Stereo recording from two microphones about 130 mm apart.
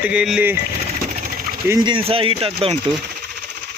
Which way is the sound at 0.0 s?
10° right (ahead or behind).